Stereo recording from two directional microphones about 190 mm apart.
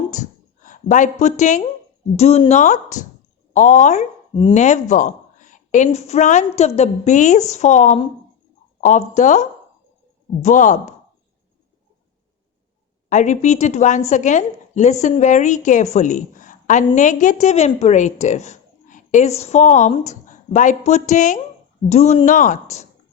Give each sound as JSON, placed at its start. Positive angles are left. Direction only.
{"t": 0.1, "sound": "a sound", "side_deg": 40}
{"t": 1.2, "sound": "speech", "side_deg": 40}
{"t": 13.1, "sound": "speech", "side_deg": 40}